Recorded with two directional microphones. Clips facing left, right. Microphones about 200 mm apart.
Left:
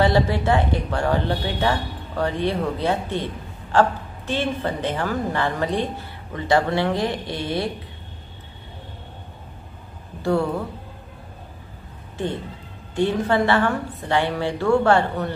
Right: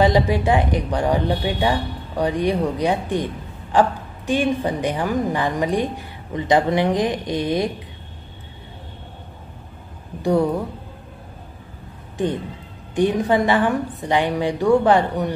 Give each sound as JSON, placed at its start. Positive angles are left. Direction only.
{"t": 0.0, "sound": "a woman's voice", "side_deg": -15}
{"t": 10.2, "sound": "a woman's voice", "side_deg": -15}
{"t": 12.9, "sound": "a woman's voice", "side_deg": -15}